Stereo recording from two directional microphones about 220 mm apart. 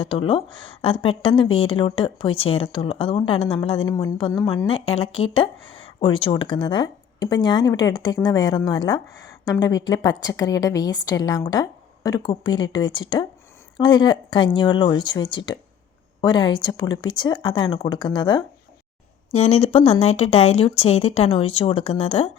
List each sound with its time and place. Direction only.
0.0 s a woman's voice: 25° left (ahead or behind)